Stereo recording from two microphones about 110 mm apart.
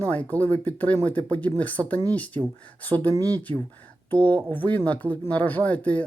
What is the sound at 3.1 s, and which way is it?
Speech, 30° right (ahead or behind).